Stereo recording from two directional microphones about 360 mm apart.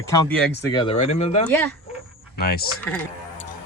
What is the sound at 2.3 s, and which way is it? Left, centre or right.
Speech, left.